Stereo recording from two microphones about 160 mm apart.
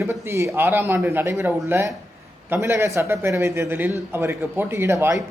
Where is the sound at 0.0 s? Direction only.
20° right (ahead or behind).